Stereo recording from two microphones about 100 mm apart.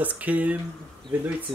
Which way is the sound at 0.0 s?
15° right (ahead or behind).